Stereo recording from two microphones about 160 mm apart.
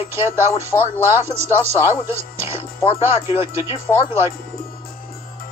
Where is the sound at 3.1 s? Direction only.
35° left (ahead or behind).